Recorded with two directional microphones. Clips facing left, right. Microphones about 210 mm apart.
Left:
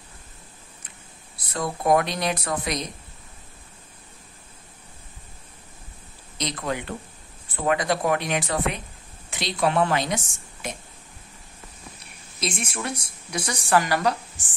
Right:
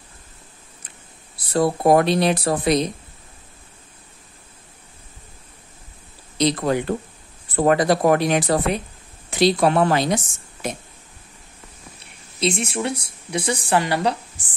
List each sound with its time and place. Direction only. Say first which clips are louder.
1.5 s a woman's voice: right 6 dB; 35° right (ahead or behind)
6.3 s a woman's voice: right 9 dB; 35° right (ahead or behind)
12.4 s a woman's voice: right 7 dB; 25° right (ahead or behind)